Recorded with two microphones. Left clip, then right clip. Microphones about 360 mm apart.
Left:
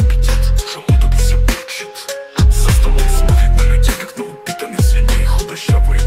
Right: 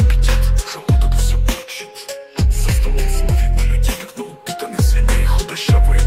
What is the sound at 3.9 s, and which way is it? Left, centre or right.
Music, left.